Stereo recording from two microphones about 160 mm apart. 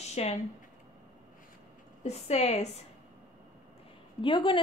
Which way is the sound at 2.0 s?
45° left (ahead or behind).